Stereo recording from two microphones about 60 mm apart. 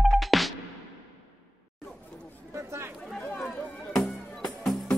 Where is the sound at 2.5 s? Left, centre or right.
Right.